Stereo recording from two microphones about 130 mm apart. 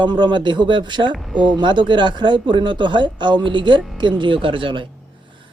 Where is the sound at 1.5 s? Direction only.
35° right (ahead or behind).